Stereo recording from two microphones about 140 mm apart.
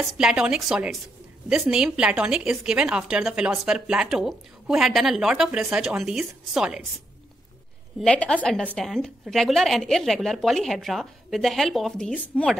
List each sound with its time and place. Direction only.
0.2 s a woman's voice: 5° right (ahead or behind)
8.0 s a woman's voice: 5° left (ahead or behind)